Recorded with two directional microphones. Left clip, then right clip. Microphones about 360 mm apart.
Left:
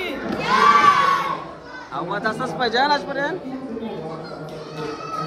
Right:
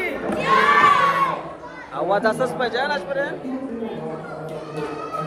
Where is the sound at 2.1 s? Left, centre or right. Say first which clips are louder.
Right 6 dB; centre.